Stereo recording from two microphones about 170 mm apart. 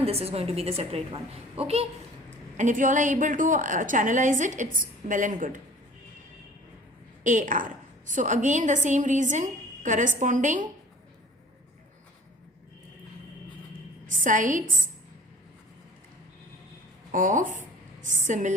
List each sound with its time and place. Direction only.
0.0 s a woman's voice: 35° right (ahead or behind)
2.6 s a woman's voice: 50° right (ahead or behind)
7.3 s a woman's voice: 50° right (ahead or behind)
14.1 s a woman's voice: 50° right (ahead or behind)
17.1 s a woman's voice: 50° right (ahead or behind)